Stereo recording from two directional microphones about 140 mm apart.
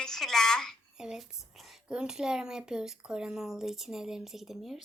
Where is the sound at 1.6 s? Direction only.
5° right (ahead or behind).